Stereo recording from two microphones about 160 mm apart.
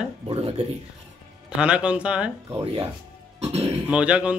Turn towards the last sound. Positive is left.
turn(degrees=-5)  # may be behind; listen again after turning